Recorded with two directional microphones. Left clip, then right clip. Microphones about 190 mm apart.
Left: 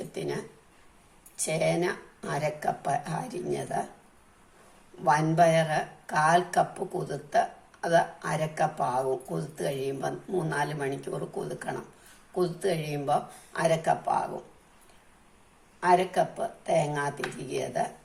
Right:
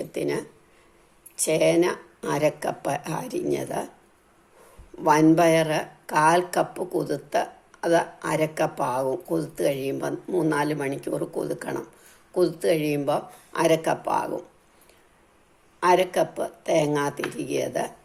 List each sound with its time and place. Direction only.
0.0 s speech: 40° right (ahead or behind)
5.0 s a woman's voice: 40° right (ahead or behind)
15.8 s a woman's voice: 45° right (ahead or behind)